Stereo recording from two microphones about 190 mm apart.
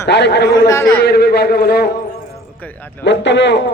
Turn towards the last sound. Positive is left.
turn(degrees=65)  # may be behind; listen again after turning